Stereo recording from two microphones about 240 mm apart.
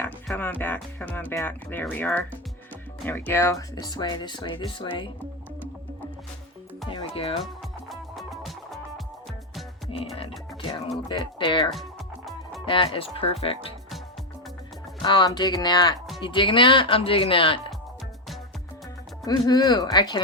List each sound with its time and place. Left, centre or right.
0.0 s speech: centre
6.9 s speech: left
7.9 s music: centre
9.9 s music: left
11.1 s speech: left
11.7 s music: centre
12.6 s speech: left
15.0 s speech: centre
19.2 s speech: centre